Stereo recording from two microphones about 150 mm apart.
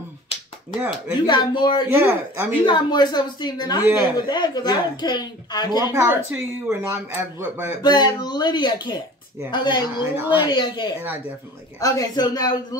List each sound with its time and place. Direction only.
0.7 s speech: 10° right (ahead or behind)
1.2 s speech: 30° left (ahead or behind)
1.9 s speech: 10° right (ahead or behind)
2.6 s speech: 30° left (ahead or behind)
3.8 s speech: 10° right (ahead or behind)
4.3 s speech: 30° left (ahead or behind)
5.9 s speech: 15° right (ahead or behind)
7.8 s speech: 30° left (ahead or behind)
10.2 s speech: 15° right (ahead or behind)
10.5 s speech: 30° left (ahead or behind)